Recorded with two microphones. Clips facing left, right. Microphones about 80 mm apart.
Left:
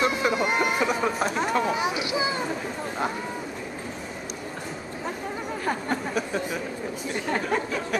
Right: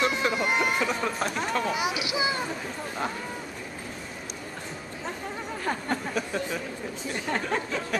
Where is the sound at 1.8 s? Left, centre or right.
Centre.